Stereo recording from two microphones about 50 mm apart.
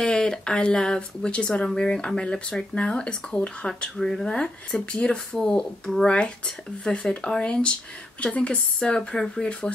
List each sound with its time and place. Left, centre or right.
0.0 s speech: centre